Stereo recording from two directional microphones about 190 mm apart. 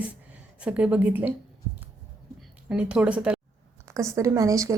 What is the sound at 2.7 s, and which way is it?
A woman's voice, 5° right (ahead or behind).